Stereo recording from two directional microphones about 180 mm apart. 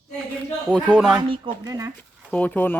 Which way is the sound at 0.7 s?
5° right (ahead or behind).